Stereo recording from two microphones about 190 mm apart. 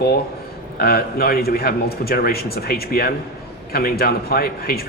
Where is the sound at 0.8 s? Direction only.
55° left (ahead or behind).